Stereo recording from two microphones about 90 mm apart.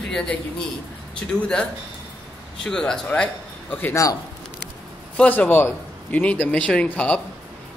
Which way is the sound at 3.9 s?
40° left (ahead or behind).